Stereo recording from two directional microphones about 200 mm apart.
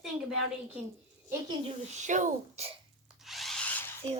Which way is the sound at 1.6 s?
35° right (ahead or behind).